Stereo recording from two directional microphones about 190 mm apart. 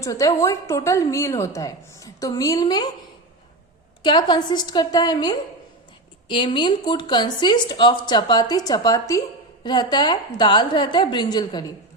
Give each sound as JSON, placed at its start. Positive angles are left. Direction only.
{"t": 0.0, "sound": "a woman's voice", "side_deg": 15}
{"t": 4.0, "sound": "speech", "side_deg": 25}